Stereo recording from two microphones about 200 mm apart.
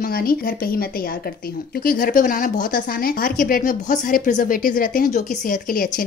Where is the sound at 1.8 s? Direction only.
45° left (ahead or behind).